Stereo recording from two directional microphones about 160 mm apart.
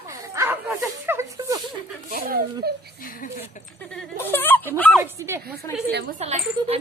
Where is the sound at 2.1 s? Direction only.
65° right (ahead or behind).